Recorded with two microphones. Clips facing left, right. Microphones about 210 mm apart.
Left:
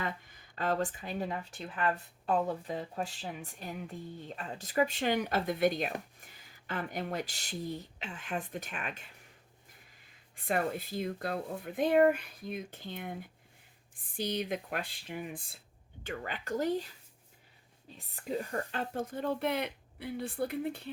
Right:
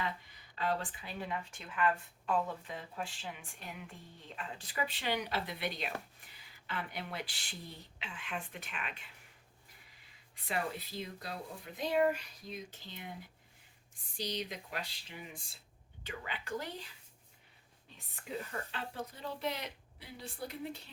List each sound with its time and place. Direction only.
0.0 s speech: 50° left (ahead or behind)
10.3 s speech: 50° left (ahead or behind)